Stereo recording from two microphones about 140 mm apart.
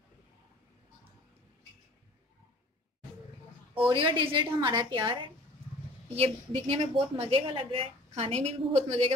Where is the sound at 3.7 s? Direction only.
40° right (ahead or behind).